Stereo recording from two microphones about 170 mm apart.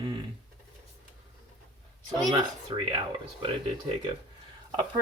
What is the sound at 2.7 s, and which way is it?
Speech, 30° right (ahead or behind).